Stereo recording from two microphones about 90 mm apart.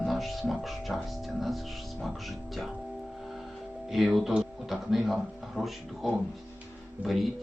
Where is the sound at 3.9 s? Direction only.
5° right (ahead or behind).